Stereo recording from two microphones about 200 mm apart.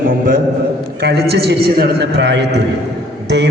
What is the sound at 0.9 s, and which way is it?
A man's voice, 55° right (ahead or behind).